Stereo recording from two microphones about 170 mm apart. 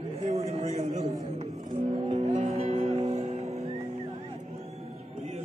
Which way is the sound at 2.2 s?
40° right (ahead or behind).